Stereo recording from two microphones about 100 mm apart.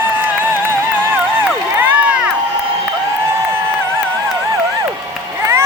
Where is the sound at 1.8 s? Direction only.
15° right (ahead or behind).